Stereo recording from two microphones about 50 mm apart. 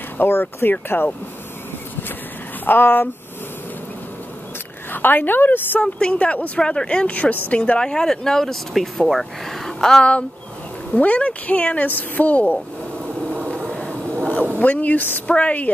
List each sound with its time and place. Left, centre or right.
0.2 s speech: left
2.6 s speech: left
4.9 s a woman's voice: left
5.8 s speech: left
6.6 s speech: centre
7.8 s speech: centre
11.0 s speech: left
13.3 s a sound: right
13.7 s a sound: left
14.6 s a woman's voice: left